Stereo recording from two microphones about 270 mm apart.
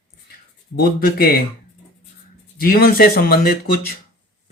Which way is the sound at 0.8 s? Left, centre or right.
Left.